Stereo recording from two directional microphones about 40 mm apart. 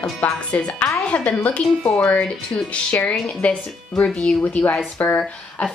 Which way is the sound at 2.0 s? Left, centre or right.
Left.